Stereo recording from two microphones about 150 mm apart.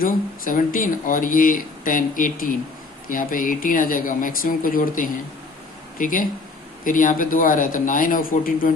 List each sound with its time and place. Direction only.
0.0 s speech: 65° left (ahead or behind)